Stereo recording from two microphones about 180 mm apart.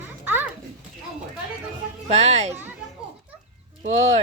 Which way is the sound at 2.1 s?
35° right (ahead or behind).